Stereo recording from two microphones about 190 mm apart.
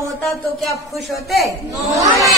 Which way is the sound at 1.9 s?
15° right (ahead or behind).